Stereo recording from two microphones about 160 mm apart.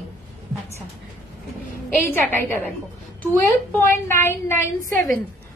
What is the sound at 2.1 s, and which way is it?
A woman's voice, 10° left (ahead or behind).